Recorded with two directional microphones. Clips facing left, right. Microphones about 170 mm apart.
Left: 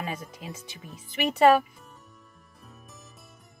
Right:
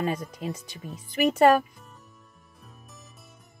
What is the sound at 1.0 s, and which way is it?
Speech, 45° right (ahead or behind).